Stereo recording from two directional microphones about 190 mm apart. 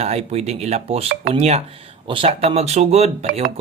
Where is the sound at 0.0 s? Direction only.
35° right (ahead or behind).